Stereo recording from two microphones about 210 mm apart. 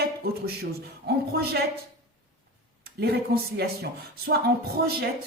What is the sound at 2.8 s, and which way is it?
Speech, 50° right (ahead or behind).